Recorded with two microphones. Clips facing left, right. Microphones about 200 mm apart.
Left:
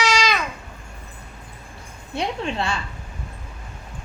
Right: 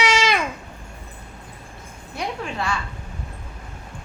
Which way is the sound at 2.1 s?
25° left (ahead or behind).